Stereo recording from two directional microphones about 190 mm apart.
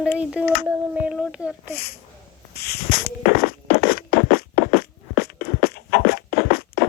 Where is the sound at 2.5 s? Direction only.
55° left (ahead or behind).